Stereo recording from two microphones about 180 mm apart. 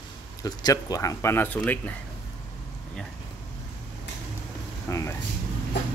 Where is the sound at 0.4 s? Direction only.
20° left (ahead or behind).